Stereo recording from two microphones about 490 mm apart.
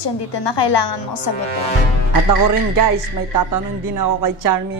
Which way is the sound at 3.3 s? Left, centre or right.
Right.